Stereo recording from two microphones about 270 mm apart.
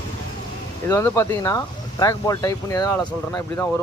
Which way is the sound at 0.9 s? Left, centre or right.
Centre.